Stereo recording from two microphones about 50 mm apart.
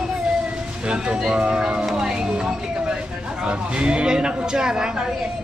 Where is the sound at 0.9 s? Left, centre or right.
Centre.